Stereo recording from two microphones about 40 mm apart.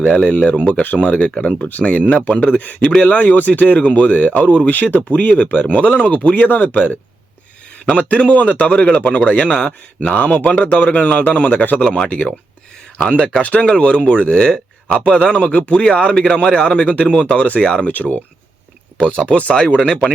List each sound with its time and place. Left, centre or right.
0.0 s speech: left
0.6 s speech: left
7.9 s speech: left
9.5 s speech: left
13.4 s speech: left
14.8 s a man's voice: left
15.1 s speech: left
17.8 s speech: left
18.9 s speech: left